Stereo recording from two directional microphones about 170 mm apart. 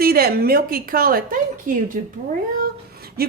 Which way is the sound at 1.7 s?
55° right (ahead or behind).